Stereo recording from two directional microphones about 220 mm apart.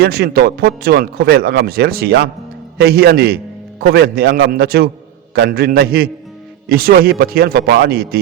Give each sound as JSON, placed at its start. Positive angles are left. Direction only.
{"t": 0.0, "sound": "speech", "side_deg": -45}